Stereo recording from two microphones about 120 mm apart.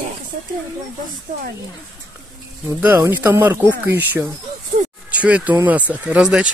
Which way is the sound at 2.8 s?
15° right (ahead or behind).